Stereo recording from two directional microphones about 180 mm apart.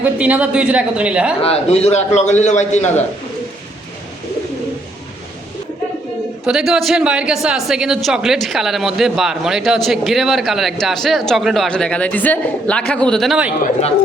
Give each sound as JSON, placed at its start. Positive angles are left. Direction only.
{"t": 0.0, "sound": "a woman's voice", "side_deg": -10}
{"t": 1.4, "sound": "a man's voice", "side_deg": 35}
{"t": 6.4, "sound": "speech", "side_deg": -5}